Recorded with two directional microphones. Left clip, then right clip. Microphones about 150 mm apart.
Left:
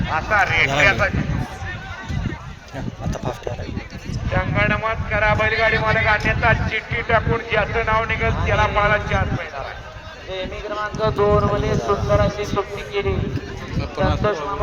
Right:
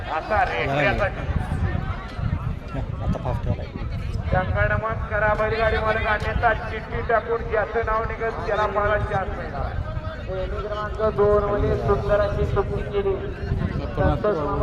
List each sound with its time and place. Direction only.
0.1 s speech: 45° right (ahead or behind)
4.3 s speech: 35° right (ahead or behind)
10.8 s speech: 30° right (ahead or behind)
11.2 s speech: 40° right (ahead or behind)